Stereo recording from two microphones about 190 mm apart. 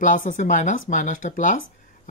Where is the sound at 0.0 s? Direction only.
45° left (ahead or behind).